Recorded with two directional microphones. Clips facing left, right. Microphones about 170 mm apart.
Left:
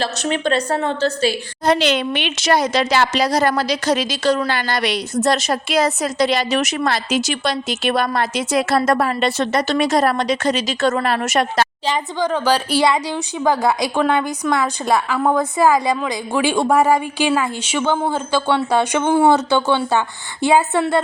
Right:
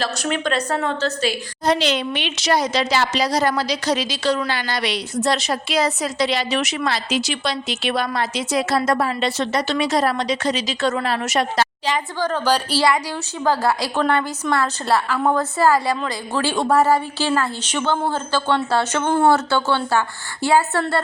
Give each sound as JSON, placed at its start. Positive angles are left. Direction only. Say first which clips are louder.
{"t": 0.0, "sound": "a woman's voice", "louder": "left 2 dB", "side_deg": 30}
{"t": 1.6, "sound": "a woman's voice", "louder": "left 3 dB", "side_deg": 55}
{"t": 12.2, "sound": "speech", "louder": "left 2 dB", "side_deg": 10}
{"t": 12.8, "sound": "speech", "louder": "left 2 dB", "side_deg": 20}